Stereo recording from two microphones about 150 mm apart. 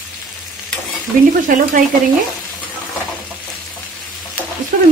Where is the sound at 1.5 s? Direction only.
60° right (ahead or behind).